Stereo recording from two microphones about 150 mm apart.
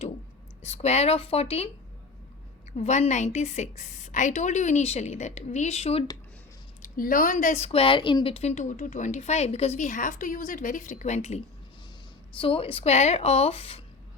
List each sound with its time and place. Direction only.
0.6 s speech: 45° left (ahead or behind)
2.7 s speech: 45° left (ahead or behind)
6.8 s speech: 70° left (ahead or behind); by 13.8 s 40° left (ahead or behind)